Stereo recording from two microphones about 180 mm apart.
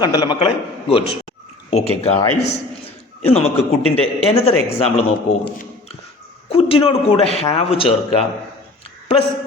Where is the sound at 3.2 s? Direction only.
35° left (ahead or behind).